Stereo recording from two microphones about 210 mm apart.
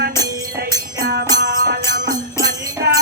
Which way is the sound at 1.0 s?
50° right (ahead or behind).